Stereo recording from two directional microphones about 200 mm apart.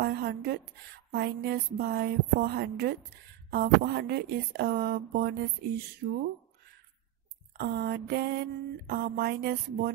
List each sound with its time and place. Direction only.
0.0 s a sound: 50° right (ahead or behind)
1.1 s speech: 50° right (ahead or behind)
7.5 s speech: 50° right (ahead or behind)